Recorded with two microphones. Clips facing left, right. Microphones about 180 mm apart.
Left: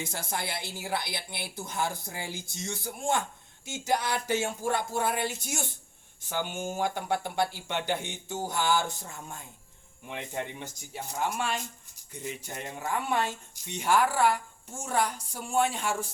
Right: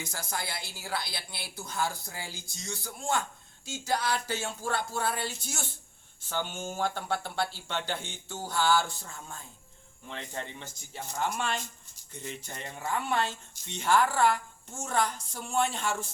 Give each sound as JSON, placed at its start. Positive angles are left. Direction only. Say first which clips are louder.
{"t": 0.0, "sound": "speech", "louder": "left 3 dB", "side_deg": 25}